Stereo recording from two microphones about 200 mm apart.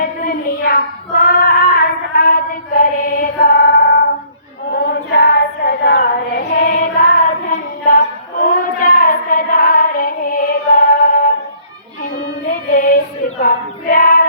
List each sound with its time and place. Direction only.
0.2 s child singing: 45° left (ahead or behind)
4.7 s female singing: 50° left (ahead or behind)
7.9 s a sound: 45° left (ahead or behind)
12.5 s music: 45° left (ahead or behind)
13.4 s child singing: 45° left (ahead or behind)